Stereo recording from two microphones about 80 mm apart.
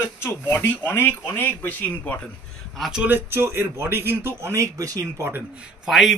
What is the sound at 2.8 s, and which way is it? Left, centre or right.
Speech, centre.